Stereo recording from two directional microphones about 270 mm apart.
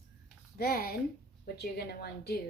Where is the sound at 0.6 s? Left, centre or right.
Left.